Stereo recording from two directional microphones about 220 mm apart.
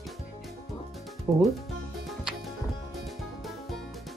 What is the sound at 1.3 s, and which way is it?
Speech, 10° right (ahead or behind).